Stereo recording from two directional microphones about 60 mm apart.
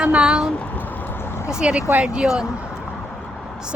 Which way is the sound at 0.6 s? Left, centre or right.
Left.